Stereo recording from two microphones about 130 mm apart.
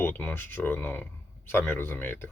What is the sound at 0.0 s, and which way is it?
Speech, 15° left (ahead or behind).